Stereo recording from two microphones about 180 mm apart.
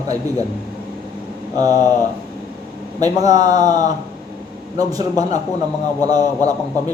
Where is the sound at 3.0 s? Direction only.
20° right (ahead or behind).